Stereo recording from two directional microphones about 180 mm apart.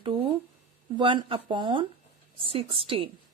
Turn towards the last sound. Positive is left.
turn(degrees=-30)  # may be behind; listen again after turning